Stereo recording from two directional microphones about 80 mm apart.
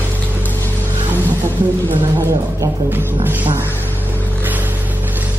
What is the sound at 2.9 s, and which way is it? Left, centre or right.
Music, right.